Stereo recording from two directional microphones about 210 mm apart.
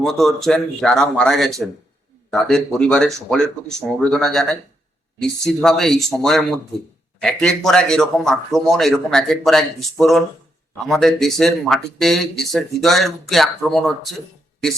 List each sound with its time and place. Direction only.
0.0 s speech: centre (ahead or behind)